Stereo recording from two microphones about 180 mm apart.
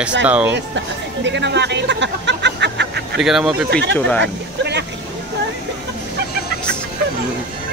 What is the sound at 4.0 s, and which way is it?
Speech, 10° left (ahead or behind).